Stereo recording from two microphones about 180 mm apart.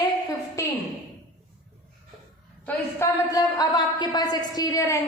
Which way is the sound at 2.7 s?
15° left (ahead or behind).